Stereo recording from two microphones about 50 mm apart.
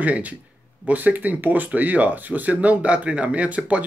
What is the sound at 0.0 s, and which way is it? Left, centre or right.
Speech, right.